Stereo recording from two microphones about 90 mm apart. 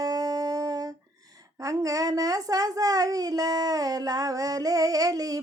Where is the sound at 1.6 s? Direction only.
40° right (ahead or behind).